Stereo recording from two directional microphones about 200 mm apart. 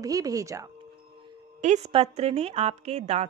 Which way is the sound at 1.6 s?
35° right (ahead or behind).